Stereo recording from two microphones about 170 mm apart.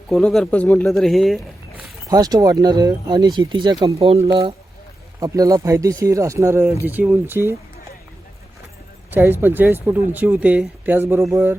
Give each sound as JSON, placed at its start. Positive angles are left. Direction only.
{"t": 0.1, "sound": "speech", "side_deg": 0}
{"t": 2.0, "sound": "speech", "side_deg": -20}
{"t": 4.0, "sound": "speech", "side_deg": -35}
{"t": 5.2, "sound": "speech", "side_deg": -20}
{"t": 9.0, "sound": "speech", "side_deg": -10}